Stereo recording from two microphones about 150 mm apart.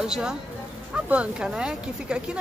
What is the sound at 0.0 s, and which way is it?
A woman's voice, 5° right (ahead or behind).